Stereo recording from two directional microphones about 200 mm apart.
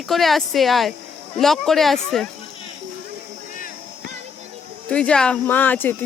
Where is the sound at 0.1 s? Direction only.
Centre (ahead or behind).